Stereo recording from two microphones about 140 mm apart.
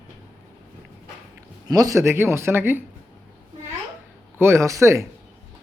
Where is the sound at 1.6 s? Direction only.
25° right (ahead or behind).